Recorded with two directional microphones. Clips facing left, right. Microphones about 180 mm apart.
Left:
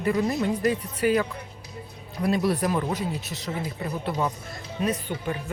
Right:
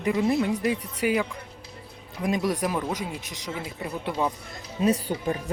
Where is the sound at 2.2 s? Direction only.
15° right (ahead or behind).